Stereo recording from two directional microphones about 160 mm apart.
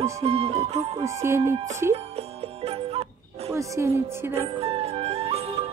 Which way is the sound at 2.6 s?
40° right (ahead or behind).